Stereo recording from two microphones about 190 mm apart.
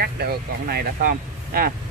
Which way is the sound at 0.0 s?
55° right (ahead or behind).